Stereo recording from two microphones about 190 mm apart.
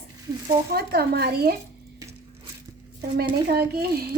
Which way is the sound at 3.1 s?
55° right (ahead or behind).